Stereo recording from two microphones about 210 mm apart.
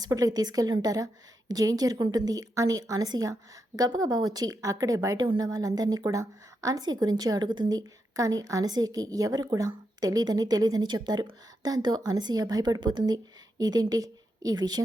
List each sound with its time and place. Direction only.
0.0 s a woman's voice: 15° right (ahead or behind)